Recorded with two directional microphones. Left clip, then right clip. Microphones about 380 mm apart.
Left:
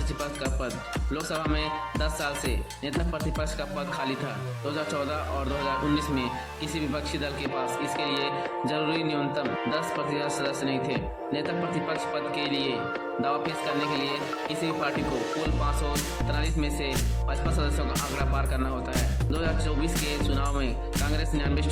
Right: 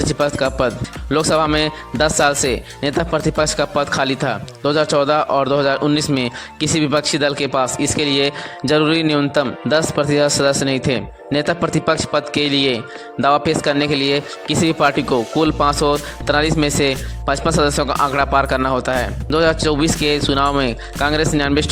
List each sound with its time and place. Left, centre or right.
0.2 s a man's voice: right